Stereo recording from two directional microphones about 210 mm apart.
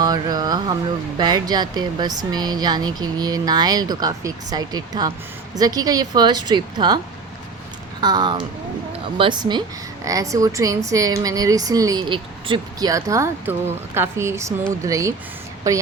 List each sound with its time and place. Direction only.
0.0 s speech: 20° right (ahead or behind)
8.0 s a woman's voice: 20° right (ahead or behind)